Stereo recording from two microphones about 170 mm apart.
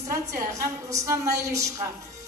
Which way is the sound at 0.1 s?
20° right (ahead or behind).